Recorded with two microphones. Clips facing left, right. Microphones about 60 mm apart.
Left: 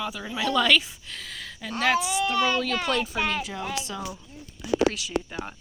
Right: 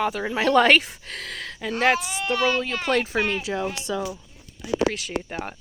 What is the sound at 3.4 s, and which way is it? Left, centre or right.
Speech, right.